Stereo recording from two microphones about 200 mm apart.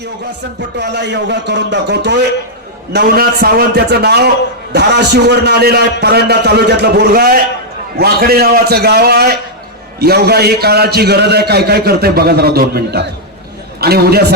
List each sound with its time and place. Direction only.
0.8 s a man's voice: 60° right (ahead or behind)